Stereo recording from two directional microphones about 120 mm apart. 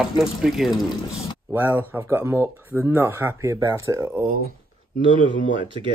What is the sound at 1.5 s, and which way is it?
Speech, 15° right (ahead or behind).